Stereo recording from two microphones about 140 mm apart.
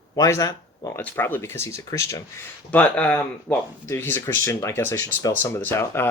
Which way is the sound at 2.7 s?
10° left (ahead or behind).